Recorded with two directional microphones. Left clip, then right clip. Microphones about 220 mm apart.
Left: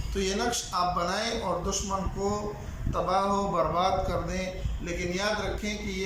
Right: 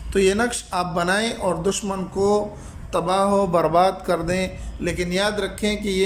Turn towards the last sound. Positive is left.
turn(degrees=-45)  # may be behind; listen again after turning